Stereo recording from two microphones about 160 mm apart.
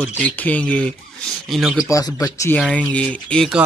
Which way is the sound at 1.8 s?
20° left (ahead or behind).